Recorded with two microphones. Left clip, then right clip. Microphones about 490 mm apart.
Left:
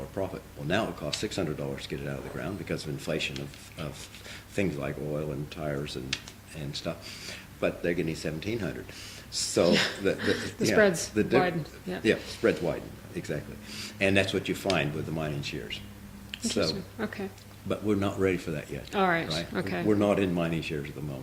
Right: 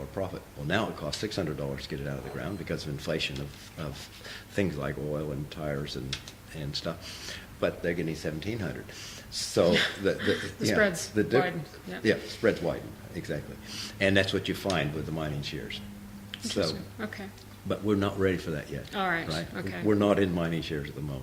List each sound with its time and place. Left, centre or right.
0.2 s speech: right
4.5 s speech: right
9.6 s speech: left
11.1 s speech: right
11.3 s speech: left
12.0 s speech: right
16.3 s speech: left
17.7 s speech: right
18.9 s speech: left
19.9 s speech: right